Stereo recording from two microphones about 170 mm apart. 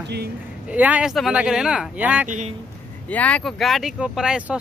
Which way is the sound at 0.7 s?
10° right (ahead or behind).